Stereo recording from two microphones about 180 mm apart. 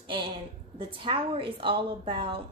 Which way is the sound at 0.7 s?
30° right (ahead or behind).